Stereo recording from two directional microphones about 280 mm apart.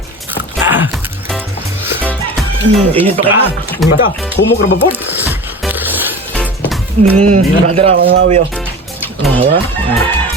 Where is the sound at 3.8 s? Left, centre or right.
Centre.